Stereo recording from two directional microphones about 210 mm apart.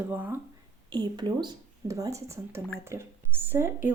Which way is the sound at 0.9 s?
20° right (ahead or behind).